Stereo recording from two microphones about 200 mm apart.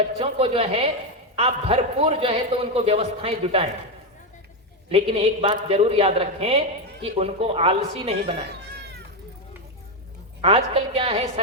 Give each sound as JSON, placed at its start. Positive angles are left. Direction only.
{"t": 0.2, "sound": "a man's voice", "side_deg": -30}
{"t": 4.9, "sound": "a man's voice", "side_deg": -30}
{"t": 10.4, "sound": "a man's voice", "side_deg": -30}